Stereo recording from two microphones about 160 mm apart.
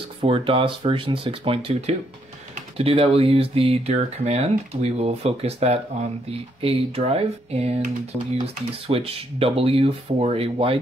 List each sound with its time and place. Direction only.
0.2 s speech: 35° right (ahead or behind)